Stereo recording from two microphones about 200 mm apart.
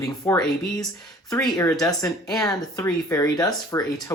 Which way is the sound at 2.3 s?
15° left (ahead or behind).